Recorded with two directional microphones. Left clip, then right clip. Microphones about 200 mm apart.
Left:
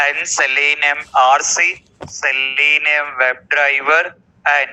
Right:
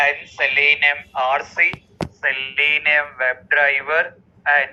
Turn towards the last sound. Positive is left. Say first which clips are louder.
# left 2 dB
turn(degrees=50)  # may be behind; listen again after turning